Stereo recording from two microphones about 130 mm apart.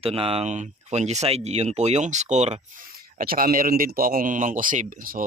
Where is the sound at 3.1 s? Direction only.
90° right.